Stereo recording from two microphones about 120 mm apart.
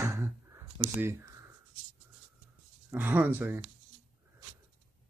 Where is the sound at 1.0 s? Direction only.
20° right (ahead or behind).